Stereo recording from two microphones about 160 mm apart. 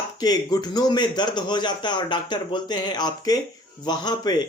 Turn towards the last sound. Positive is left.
turn(degrees=25)  # may be behind; listen again after turning